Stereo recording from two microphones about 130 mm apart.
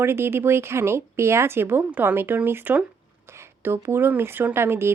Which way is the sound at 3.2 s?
20° right (ahead or behind).